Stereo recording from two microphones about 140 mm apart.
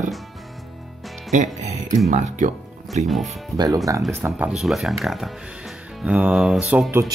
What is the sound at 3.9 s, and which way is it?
Speech, 25° right (ahead or behind).